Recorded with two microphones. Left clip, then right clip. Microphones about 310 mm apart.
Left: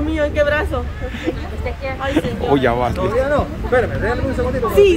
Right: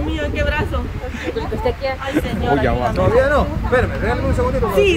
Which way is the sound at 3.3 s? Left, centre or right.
Right.